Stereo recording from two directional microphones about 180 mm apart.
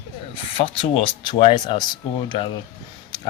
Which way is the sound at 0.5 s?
30° left (ahead or behind).